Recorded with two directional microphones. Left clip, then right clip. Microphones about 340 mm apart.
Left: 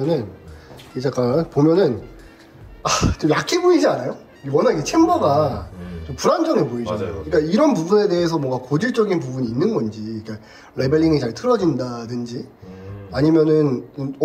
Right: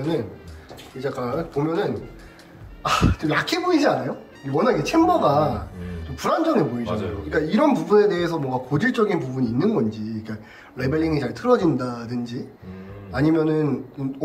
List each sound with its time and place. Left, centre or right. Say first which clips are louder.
1.0 s a man's voice: left 7 dB; centre